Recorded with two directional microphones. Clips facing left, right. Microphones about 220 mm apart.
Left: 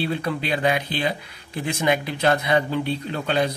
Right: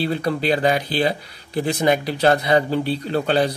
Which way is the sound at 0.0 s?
35° right (ahead or behind).